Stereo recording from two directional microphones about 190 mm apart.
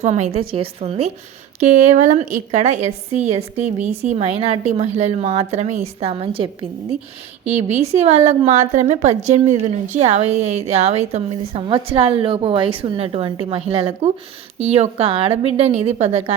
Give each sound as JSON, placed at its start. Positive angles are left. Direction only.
{"t": 0.0, "sound": "a woman's voice", "side_deg": -35}